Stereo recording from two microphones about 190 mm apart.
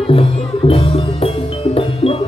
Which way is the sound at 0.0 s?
30° left (ahead or behind).